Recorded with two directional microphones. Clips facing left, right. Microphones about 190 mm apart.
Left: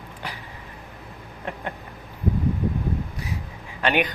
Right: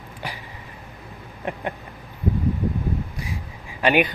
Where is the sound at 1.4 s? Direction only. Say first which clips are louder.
Right 4 dB; 15° right (ahead or behind).